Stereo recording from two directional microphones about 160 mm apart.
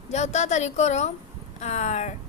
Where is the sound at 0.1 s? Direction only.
45° left (ahead or behind).